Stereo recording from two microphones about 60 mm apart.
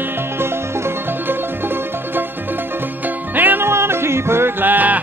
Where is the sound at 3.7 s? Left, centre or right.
Right.